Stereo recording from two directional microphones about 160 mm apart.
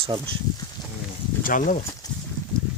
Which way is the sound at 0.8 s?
25° left (ahead or behind).